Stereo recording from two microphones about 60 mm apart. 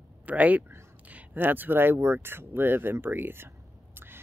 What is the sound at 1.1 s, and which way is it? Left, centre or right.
Speech, right.